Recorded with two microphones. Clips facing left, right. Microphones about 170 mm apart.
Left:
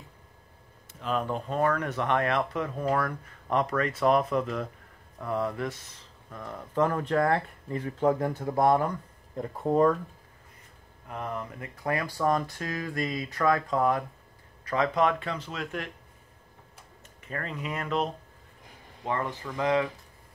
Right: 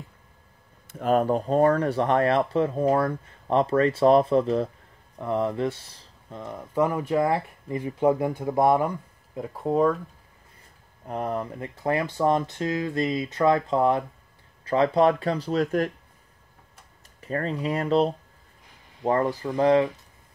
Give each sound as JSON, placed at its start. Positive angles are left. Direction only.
{"t": 0.9, "sound": "speech", "side_deg": -45}
{"t": 6.4, "sound": "speech", "side_deg": -15}
{"t": 11.1, "sound": "speech", "side_deg": -35}
{"t": 17.2, "sound": "speech", "side_deg": -35}